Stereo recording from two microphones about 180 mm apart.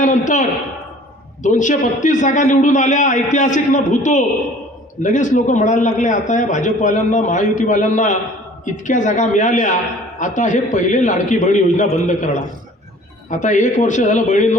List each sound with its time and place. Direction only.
0.0 s a man's voice: 45° left (ahead or behind)